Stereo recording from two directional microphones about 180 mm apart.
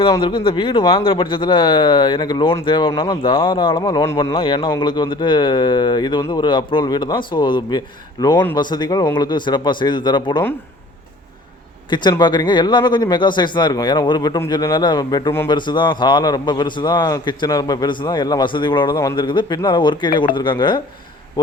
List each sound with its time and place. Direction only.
0.1 s a man's voice: 25° left (ahead or behind)
4.4 s a man's voice: 30° left (ahead or behind)
11.9 s a man's voice: 25° left (ahead or behind)